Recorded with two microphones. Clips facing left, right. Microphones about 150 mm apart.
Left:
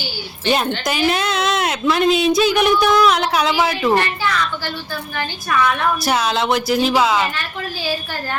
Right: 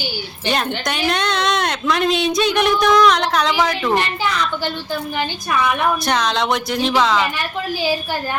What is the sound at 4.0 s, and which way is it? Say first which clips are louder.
A woman's voice: left 1 dB; 20° right (ahead or behind).